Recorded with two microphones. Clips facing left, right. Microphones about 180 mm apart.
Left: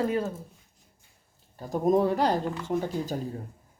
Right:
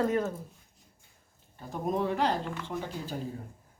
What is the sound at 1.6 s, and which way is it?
Speech, 40° left (ahead or behind).